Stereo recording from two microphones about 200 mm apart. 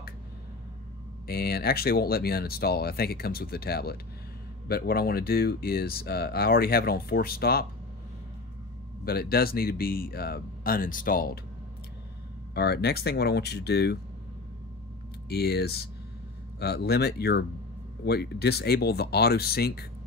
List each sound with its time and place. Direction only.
1.2 s speech: 50° left (ahead or behind)
9.0 s speech: 50° left (ahead or behind)
12.5 s speech: 55° left (ahead or behind)
15.2 s speech: 55° left (ahead or behind)